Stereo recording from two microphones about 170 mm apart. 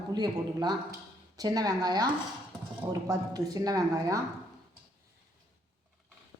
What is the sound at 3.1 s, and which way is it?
A woman's voice, 20° right (ahead or behind).